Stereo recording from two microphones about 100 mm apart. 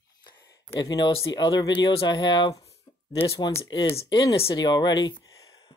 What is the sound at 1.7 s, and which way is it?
Speech, 55° left (ahead or behind).